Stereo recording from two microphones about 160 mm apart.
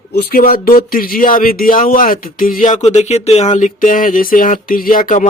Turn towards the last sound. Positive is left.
turn(degrees=55)  # may be behind; listen again after turning